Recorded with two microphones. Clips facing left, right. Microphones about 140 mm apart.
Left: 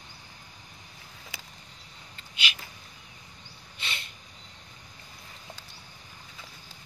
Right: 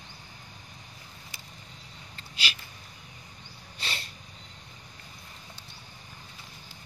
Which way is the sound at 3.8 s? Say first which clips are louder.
Right 1 dB; 35° right (ahead or behind).